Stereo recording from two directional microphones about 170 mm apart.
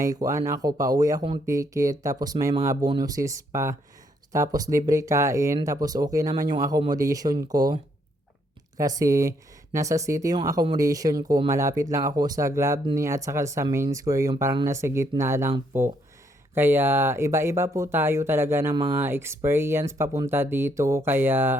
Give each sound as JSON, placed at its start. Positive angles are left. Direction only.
{"t": 0.0, "sound": "speech", "side_deg": -20}
{"t": 8.8, "sound": "speech", "side_deg": -20}